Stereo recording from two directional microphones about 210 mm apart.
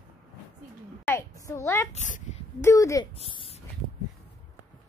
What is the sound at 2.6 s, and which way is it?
Speech, 15° left (ahead or behind).